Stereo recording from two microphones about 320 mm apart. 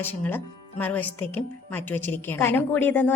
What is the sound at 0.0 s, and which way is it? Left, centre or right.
Speech, centre.